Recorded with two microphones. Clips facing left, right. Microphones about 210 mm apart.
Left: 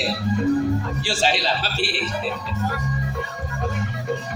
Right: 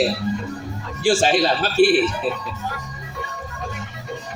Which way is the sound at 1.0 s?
50° right (ahead or behind).